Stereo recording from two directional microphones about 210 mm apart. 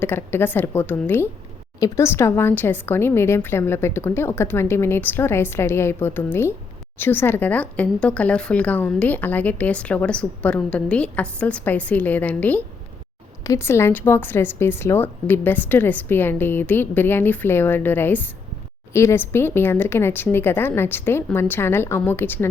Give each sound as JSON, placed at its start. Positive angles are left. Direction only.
{"t": 0.0, "sound": "speech", "side_deg": 10}